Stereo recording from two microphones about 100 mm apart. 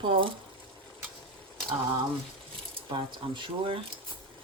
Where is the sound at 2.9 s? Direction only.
55° right (ahead or behind).